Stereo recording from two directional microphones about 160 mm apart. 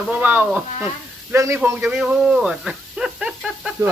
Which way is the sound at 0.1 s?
10° right (ahead or behind).